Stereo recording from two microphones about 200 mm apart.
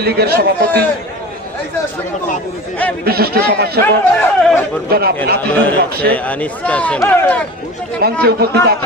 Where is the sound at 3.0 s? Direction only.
50° right (ahead or behind).